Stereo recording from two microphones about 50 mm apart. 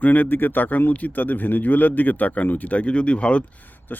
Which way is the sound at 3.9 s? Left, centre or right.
Left.